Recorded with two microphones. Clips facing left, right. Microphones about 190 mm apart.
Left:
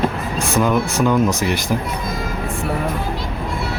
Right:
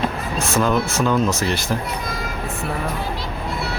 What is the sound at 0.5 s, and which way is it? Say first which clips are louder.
Speech: left 2 dB; 15° left (ahead or behind).